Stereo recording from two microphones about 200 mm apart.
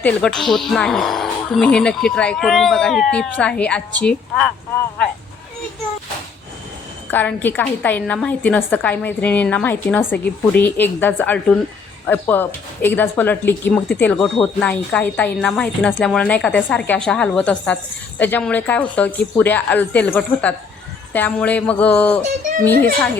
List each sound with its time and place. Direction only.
0.0 s speech: 5° left (ahead or behind)
7.1 s speech: 10° left (ahead or behind)